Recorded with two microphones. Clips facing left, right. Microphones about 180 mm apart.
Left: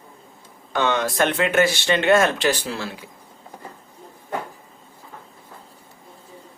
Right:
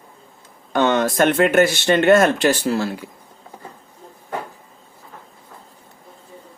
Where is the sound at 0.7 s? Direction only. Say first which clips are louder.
Right 4 dB; 50° right (ahead or behind).